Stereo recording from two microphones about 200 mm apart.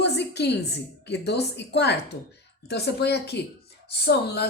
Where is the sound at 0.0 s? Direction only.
55° left (ahead or behind).